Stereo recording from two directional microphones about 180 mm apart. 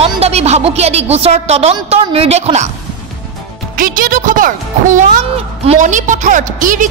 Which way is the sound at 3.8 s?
50° right (ahead or behind).